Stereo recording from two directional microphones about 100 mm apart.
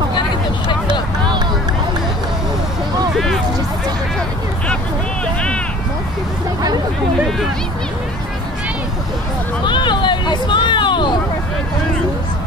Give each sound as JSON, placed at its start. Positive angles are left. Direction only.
{"t": 9.7, "sound": "hubbub", "side_deg": 50}